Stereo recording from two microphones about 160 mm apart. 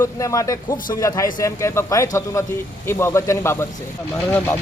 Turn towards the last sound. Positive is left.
turn(degrees=15)  # may be behind; listen again after turning